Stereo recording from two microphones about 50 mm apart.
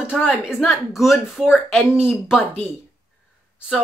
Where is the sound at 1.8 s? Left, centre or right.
Centre.